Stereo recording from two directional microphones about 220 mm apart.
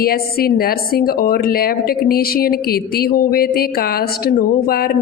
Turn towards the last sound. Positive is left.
turn(degrees=45)  # may be behind; listen again after turning